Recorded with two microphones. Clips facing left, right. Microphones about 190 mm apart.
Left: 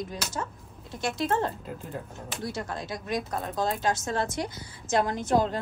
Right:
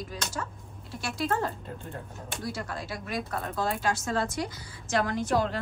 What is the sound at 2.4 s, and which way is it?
Speech, 20° left (ahead or behind).